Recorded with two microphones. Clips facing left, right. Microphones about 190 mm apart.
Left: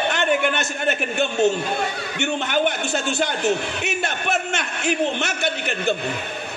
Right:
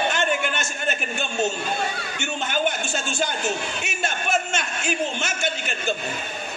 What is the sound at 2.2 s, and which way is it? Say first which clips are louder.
A man's voice: left 5 dB; 60° left (ahead or behind).